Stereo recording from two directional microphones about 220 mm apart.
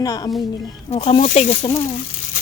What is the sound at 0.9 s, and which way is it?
Speech, 25° left (ahead or behind).